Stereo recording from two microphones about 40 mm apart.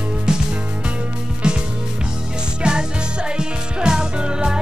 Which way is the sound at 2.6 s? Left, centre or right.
Right.